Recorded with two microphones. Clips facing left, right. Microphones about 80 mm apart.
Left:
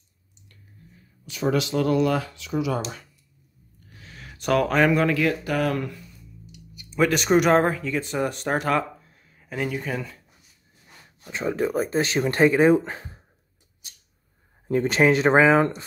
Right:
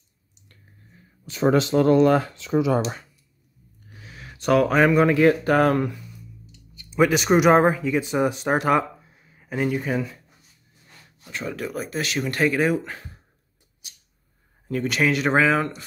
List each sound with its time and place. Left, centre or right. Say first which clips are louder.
1.2 s speech: right 4 dB; right
4.0 s a sound: right 3 dB; centre
5.0 s speech: right 5 dB; right
6.9 s speech: right 1 dB; centre
11.2 s speech: left 5 dB; left
14.7 s speech: left 3 dB; left